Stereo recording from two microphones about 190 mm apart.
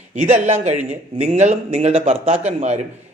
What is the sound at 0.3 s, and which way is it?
Speech, 35° right (ahead or behind).